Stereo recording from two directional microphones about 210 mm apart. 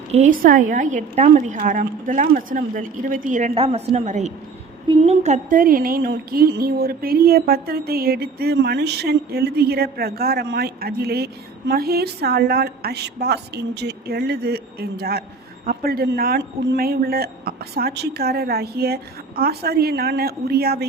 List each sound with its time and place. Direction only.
0.1 s a woman's voice: 35° right (ahead or behind)